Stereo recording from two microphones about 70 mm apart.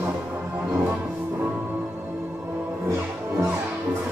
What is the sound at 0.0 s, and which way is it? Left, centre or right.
Music, right.